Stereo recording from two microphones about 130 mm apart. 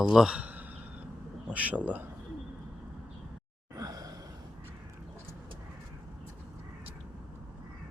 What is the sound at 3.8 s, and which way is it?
Sigh, 30° right (ahead or behind).